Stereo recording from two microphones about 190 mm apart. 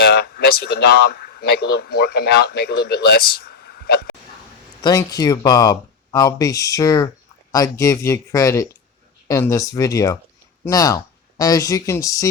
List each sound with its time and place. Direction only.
0.0 s speech: 55° left (ahead or behind)
4.8 s speech: 20° left (ahead or behind)